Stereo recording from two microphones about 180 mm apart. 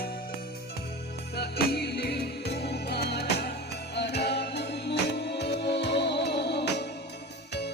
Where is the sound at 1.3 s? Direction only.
60° left (ahead or behind).